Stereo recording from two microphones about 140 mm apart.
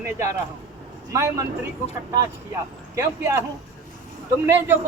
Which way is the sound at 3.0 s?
20° right (ahead or behind).